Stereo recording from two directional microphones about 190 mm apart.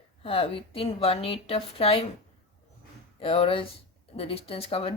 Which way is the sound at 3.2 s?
30° left (ahead or behind).